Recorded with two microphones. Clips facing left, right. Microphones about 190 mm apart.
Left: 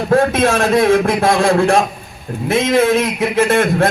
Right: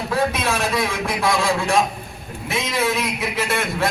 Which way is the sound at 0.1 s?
50° left (ahead or behind).